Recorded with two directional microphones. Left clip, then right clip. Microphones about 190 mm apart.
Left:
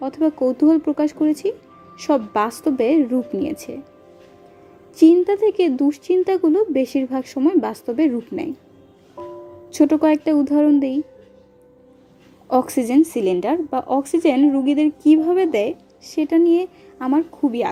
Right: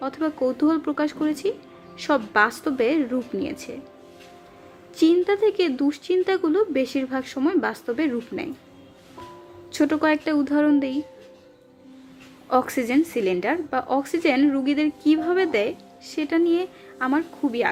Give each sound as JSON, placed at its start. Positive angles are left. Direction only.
{"t": 0.0, "sound": "a woman's voice", "side_deg": 20}
{"t": 4.9, "sound": "a woman's voice", "side_deg": 20}
{"t": 9.7, "sound": "a woman's voice", "side_deg": 20}
{"t": 12.5, "sound": "a woman's voice", "side_deg": 20}